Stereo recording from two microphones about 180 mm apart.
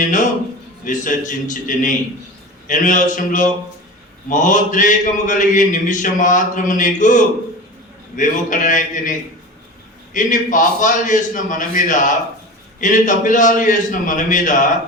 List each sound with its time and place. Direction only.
0.9 s mantra: 45° left (ahead or behind)
10.2 s mantra: 45° left (ahead or behind)